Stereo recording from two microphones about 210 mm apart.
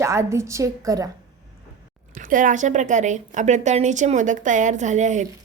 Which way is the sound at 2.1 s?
40° right (ahead or behind).